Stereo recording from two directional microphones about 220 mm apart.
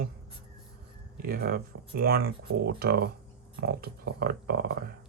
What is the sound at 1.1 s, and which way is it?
Speech, 40° right (ahead or behind).